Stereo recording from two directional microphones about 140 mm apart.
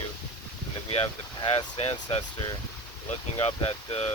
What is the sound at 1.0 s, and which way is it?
Speech, 35° left (ahead or behind).